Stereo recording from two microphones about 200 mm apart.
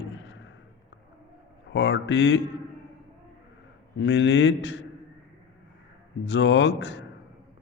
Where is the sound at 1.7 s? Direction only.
65° left (ahead or behind).